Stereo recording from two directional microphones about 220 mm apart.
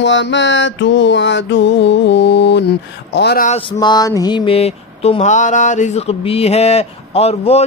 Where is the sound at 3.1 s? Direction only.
50° left (ahead or behind).